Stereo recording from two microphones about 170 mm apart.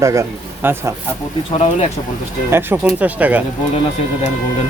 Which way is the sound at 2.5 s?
15° right (ahead or behind).